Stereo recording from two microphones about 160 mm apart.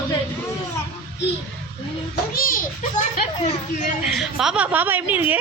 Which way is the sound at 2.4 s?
60° left (ahead or behind).